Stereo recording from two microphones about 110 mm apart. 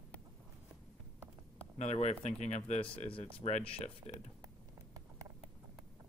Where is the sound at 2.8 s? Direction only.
55° left (ahead or behind).